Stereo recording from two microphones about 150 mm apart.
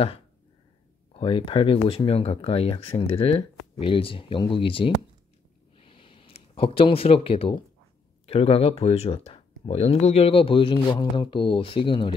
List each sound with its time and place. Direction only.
1.1 s speech: 35° left (ahead or behind)
5.8 s a sound: 35° left (ahead or behind)
8.3 s speech: 40° left (ahead or behind)